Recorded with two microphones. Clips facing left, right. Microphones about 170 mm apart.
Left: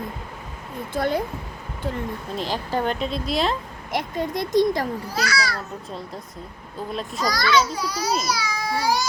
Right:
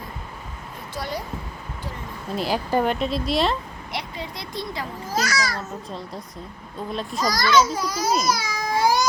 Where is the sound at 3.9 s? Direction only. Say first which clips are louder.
Left 8 dB; 50° left (ahead or behind).